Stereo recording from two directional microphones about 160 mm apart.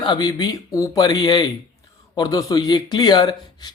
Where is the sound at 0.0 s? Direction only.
25° left (ahead or behind).